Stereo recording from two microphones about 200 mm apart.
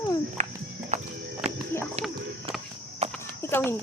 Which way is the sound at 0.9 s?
35° right (ahead or behind).